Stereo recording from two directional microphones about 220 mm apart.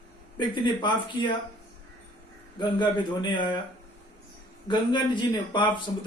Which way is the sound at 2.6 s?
20° left (ahead or behind).